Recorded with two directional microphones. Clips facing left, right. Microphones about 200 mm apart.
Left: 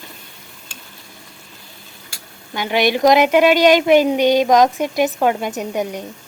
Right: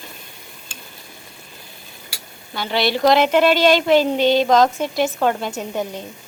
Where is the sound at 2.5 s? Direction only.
15° left (ahead or behind).